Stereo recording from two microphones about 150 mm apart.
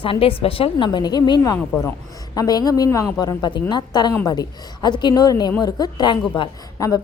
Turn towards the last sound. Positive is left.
turn(degrees=30)  # may be behind; listen again after turning